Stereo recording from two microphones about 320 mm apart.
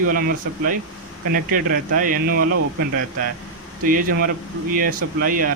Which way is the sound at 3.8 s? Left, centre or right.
Right.